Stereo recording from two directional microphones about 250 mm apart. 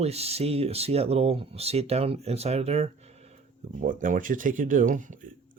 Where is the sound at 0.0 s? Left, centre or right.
Right.